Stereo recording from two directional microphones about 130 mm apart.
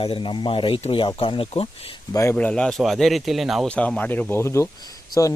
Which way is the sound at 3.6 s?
10° left (ahead or behind).